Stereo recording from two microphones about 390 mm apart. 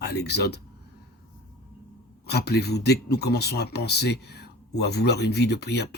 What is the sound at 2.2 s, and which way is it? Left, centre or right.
Speech, left.